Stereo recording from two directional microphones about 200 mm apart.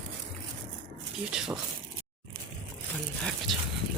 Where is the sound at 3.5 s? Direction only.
Centre (ahead or behind).